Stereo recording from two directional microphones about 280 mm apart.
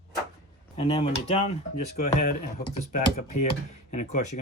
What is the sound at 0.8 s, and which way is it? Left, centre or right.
Speech, left.